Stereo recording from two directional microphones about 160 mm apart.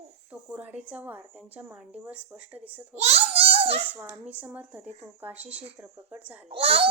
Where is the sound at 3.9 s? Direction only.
10° right (ahead or behind).